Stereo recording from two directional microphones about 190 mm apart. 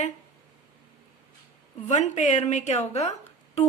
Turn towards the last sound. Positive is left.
turn(degrees=35)  # may be behind; listen again after turning